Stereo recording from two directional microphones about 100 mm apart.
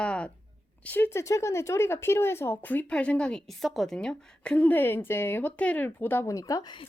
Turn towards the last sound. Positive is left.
turn(degrees=35)  # may be behind; listen again after turning